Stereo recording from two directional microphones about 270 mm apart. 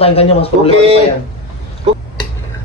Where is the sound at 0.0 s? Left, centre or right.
Left.